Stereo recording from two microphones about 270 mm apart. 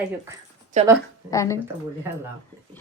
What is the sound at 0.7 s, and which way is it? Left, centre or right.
Speech, right.